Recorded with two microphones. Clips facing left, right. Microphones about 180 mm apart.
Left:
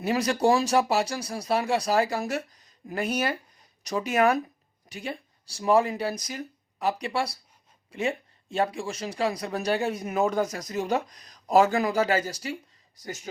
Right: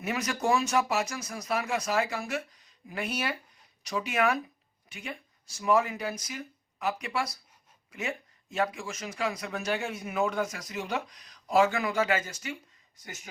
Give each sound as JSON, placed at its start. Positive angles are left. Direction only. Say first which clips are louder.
{"t": 0.0, "sound": "speech", "louder": "left 7 dB", "side_deg": 35}